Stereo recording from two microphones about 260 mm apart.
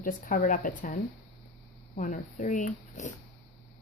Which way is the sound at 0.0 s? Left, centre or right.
Left.